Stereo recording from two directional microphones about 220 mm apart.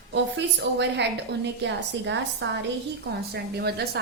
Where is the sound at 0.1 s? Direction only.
50° right (ahead or behind).